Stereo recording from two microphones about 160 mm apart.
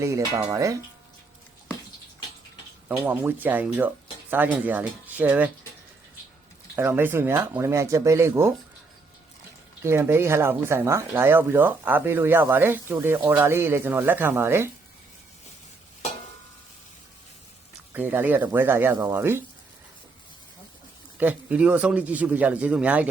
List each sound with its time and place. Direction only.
0.5 s speech: 20° right (ahead or behind)
3.0 s speech: 10° right (ahead or behind)
6.7 s speech: 15° right (ahead or behind)
9.8 s speech: 15° right (ahead or behind)
17.9 s speech: 10° right (ahead or behind)
21.2 s speech: 10° right (ahead or behind)